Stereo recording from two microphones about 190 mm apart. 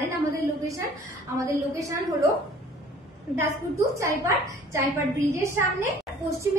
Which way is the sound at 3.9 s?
15° right (ahead or behind).